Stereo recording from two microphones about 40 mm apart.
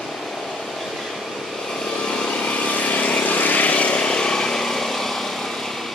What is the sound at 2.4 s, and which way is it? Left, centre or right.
Vehicle, left.